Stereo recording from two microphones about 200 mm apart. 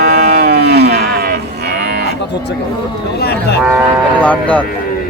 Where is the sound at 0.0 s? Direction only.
50° right (ahead or behind).